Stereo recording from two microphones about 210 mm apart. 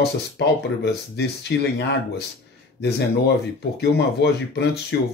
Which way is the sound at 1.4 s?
55° left (ahead or behind).